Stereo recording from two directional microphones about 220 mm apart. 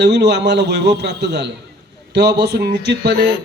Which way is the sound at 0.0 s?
50° right (ahead or behind).